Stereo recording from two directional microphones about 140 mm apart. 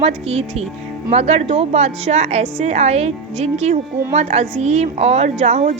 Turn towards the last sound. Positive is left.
turn(degrees=-55)  # may be behind; listen again after turning